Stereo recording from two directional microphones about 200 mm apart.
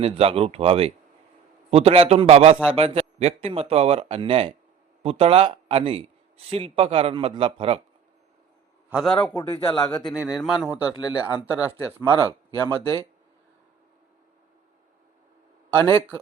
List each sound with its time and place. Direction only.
0.0 s a man's voice: 30° right (ahead or behind)
8.9 s a man's voice: 5° right (ahead or behind)
9.3 s speech: 25° left (ahead or behind)
10.0 s a man's voice: 5° left (ahead or behind)
10.7 s speech: 20° left (ahead or behind)
12.0 s speech: 20° right (ahead or behind)
15.7 s speech: 25° right (ahead or behind)